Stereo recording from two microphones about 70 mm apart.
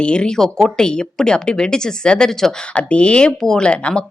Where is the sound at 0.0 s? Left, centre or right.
Centre.